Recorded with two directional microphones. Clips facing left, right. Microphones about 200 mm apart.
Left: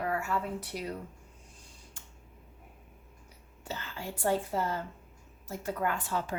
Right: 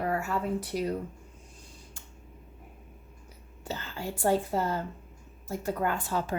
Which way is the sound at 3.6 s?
35° right (ahead or behind).